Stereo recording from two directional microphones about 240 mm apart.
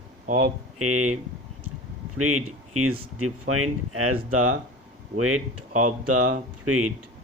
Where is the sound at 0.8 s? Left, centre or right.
Right.